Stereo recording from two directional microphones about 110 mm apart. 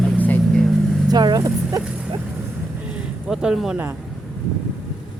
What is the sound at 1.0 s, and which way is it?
Speech, 40° right (ahead or behind).